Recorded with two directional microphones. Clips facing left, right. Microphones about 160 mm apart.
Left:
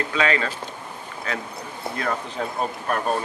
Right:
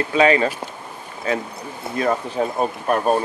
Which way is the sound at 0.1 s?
25° right (ahead or behind).